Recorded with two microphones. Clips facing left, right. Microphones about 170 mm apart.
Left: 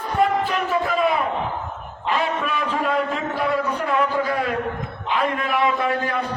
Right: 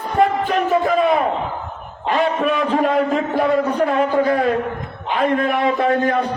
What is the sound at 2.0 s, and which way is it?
A man's voice, 40° right (ahead or behind).